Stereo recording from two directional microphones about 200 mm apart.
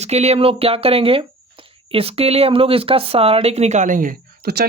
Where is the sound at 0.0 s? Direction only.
35° right (ahead or behind).